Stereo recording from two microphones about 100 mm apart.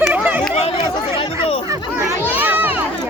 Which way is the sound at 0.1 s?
20° right (ahead or behind).